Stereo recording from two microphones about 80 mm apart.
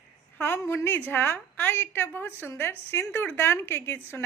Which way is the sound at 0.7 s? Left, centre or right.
Left.